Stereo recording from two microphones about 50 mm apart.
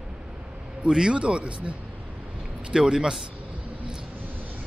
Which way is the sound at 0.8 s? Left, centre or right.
Centre.